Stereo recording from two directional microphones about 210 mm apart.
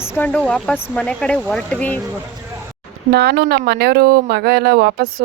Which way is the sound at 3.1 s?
50° right (ahead or behind).